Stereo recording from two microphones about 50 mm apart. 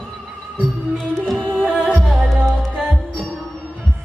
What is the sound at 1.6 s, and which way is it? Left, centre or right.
Music, right.